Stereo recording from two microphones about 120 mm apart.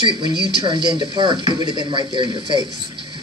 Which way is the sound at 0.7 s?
40° right (ahead or behind).